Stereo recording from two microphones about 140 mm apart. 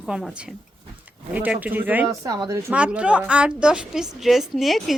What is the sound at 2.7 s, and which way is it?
A woman's voice, 10° right (ahead or behind).